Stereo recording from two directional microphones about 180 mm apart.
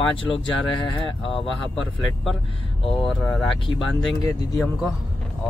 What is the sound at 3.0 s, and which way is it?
Speech, 5° left (ahead or behind).